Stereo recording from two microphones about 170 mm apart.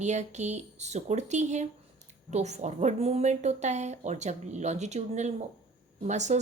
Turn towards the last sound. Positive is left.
turn(degrees=-45)  # may be behind; listen again after turning